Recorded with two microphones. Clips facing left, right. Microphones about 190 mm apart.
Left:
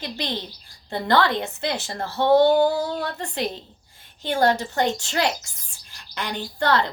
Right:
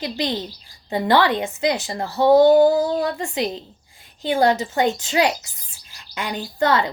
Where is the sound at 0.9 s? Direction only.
15° right (ahead or behind).